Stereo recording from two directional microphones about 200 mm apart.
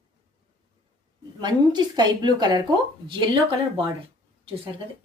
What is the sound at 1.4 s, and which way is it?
Speech, 20° right (ahead or behind).